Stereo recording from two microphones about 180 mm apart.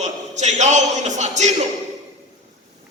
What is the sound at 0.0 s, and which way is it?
A man's voice, 40° right (ahead or behind).